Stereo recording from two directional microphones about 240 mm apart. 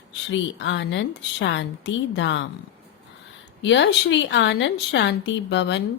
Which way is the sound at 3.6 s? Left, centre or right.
Left.